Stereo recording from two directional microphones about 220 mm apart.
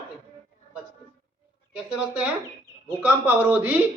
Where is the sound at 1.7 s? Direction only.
5° right (ahead or behind).